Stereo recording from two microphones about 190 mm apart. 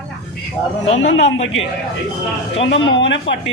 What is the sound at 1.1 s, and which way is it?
Speech, 70° left (ahead or behind).